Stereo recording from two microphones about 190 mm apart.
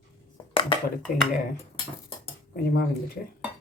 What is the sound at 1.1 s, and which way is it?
Speech, 45° left (ahead or behind).